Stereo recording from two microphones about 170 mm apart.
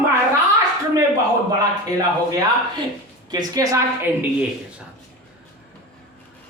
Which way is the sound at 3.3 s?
15° right (ahead or behind).